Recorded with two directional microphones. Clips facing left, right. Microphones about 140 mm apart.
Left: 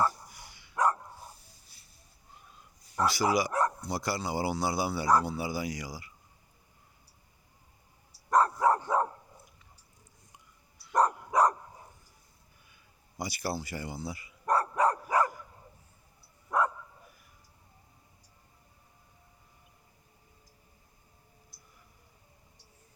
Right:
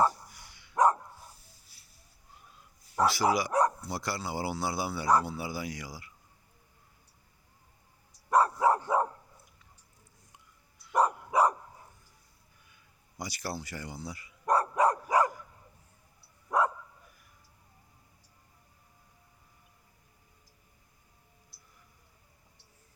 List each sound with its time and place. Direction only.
0.3 s dog: 10° left (ahead or behind)
1.7 s a sound: 5° right (ahead or behind)
2.9 s speech: 5° right (ahead or behind)
8.3 s dog: 10° right (ahead or behind)
10.9 s dog: 5° right (ahead or behind)
13.1 s speech: 10° left (ahead or behind)
14.4 s dog: 15° right (ahead or behind)
16.5 s dog: 15° right (ahead or behind)
21.5 s a sound: 45° left (ahead or behind)